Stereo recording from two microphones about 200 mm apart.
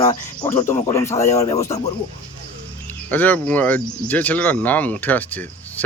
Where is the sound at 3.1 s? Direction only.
10° left (ahead or behind).